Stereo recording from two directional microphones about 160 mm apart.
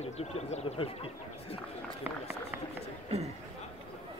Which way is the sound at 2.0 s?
10° right (ahead or behind).